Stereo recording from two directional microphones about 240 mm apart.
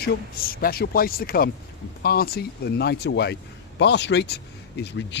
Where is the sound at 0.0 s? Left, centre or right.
Left.